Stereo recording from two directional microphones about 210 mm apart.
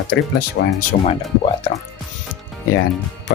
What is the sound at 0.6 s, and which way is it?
Speech, 50° left (ahead or behind).